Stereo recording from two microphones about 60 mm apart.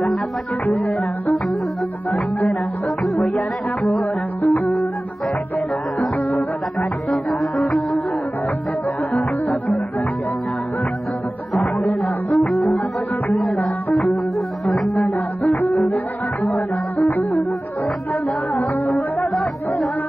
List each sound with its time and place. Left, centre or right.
4.4 s music: left
7.1 s music: centre
12.4 s music: centre
17.1 s music: left